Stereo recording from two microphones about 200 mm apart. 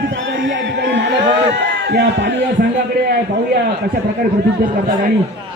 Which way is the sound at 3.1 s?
50° right (ahead or behind).